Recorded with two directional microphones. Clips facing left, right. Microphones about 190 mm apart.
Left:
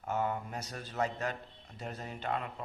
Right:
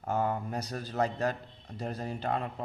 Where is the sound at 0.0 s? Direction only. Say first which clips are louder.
Right 3 dB; 35° right (ahead or behind).